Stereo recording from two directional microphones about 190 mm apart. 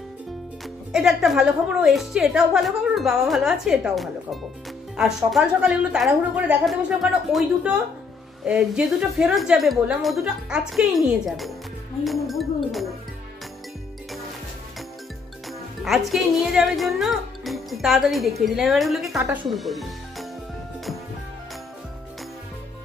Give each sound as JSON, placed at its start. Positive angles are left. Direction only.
{"t": 0.9, "sound": "a woman's voice", "side_deg": 0}
{"t": 15.8, "sound": "a woman's voice", "side_deg": 0}
{"t": 19.1, "sound": "a woman's voice", "side_deg": -15}
{"t": 19.5, "sound": "music", "side_deg": 0}